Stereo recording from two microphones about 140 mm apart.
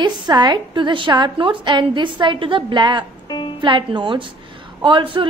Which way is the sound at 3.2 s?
30° left (ahead or behind).